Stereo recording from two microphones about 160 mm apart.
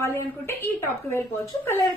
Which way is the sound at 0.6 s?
15° left (ahead or behind).